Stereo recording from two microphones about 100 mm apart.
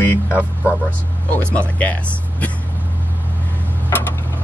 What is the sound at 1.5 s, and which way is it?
Speech, 15° left (ahead or behind).